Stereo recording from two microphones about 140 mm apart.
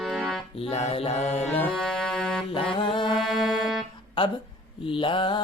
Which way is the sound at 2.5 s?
40° left (ahead or behind).